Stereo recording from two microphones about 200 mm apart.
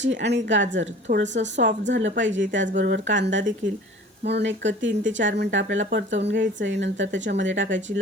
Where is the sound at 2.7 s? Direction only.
55° right (ahead or behind).